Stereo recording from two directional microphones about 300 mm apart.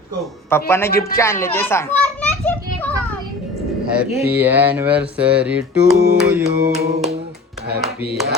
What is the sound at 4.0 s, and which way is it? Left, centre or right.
Speech, centre.